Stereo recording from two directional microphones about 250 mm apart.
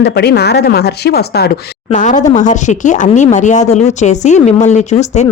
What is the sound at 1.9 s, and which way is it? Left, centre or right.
Speech, left.